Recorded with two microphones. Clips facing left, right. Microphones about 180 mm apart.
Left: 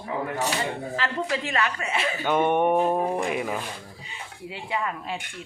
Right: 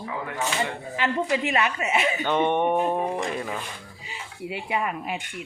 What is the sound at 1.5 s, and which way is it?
Speech, 20° right (ahead or behind).